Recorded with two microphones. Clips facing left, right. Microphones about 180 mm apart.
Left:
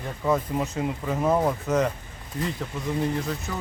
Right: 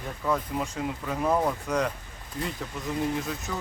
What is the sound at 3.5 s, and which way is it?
Speech, 5° left (ahead or behind).